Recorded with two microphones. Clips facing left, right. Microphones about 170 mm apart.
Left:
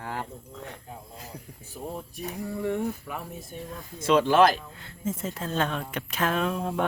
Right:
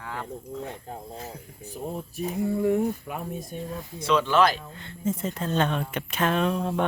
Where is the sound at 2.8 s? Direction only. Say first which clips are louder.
Right 3 dB; 15° right (ahead or behind).